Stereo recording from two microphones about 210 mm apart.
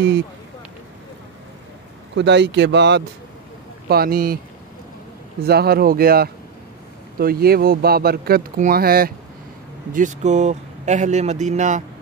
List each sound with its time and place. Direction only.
2.1 s speech: 55° right (ahead or behind)
3.9 s speech: 45° right (ahead or behind)
5.4 s speech: 50° right (ahead or behind)
9.9 s speech: 35° right (ahead or behind)